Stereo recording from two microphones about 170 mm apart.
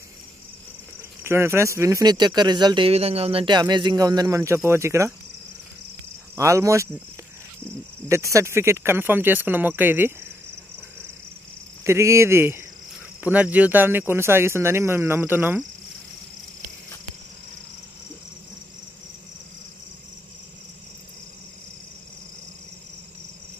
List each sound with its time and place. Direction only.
1.2 s speech: 15° right (ahead or behind)
6.3 s speech: 20° right (ahead or behind)
8.1 s speech: 20° right (ahead or behind)
11.8 s speech: 15° right (ahead or behind)